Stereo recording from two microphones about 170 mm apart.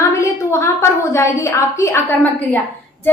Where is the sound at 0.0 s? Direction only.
15° left (ahead or behind).